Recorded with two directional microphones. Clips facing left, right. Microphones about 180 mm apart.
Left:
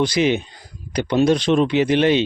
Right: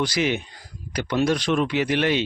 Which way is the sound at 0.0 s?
20° left (ahead or behind).